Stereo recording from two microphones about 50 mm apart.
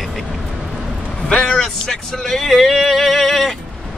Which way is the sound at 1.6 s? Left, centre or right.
Centre.